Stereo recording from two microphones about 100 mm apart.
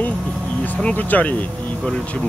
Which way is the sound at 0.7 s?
15° left (ahead or behind).